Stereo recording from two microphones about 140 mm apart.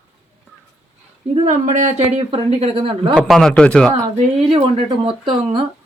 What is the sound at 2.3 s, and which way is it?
Speech, 45° right (ahead or behind).